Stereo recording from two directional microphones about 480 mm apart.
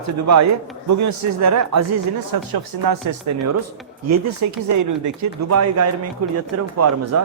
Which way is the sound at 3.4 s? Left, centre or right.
Right.